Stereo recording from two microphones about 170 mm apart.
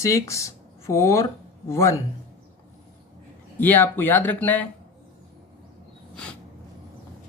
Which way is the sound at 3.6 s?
10° left (ahead or behind).